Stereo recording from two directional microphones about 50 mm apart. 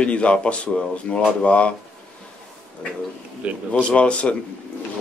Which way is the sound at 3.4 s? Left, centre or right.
Right.